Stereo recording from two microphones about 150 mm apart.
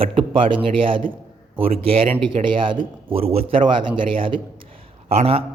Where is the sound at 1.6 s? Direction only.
40° right (ahead or behind).